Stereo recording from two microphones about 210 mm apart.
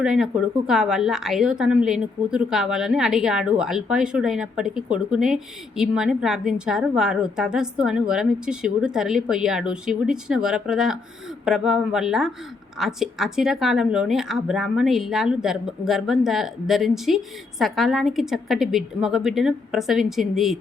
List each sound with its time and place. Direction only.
0.0 s speech: 5° right (ahead or behind)